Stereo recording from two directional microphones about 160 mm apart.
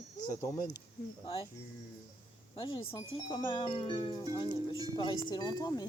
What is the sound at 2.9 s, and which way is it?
Speech, 30° left (ahead or behind).